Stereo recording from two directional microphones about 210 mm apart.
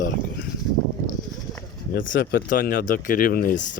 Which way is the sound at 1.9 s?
60° left (ahead or behind).